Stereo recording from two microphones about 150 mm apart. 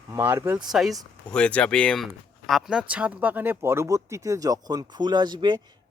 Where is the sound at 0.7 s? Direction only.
Centre (ahead or behind).